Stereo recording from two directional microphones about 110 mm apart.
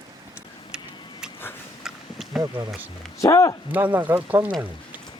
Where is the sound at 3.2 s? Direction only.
30° left (ahead or behind).